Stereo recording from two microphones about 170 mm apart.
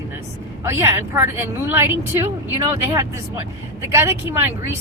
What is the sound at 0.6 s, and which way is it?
Speech, 15° right (ahead or behind).